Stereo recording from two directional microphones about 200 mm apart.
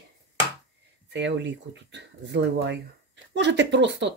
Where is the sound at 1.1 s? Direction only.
60° right (ahead or behind).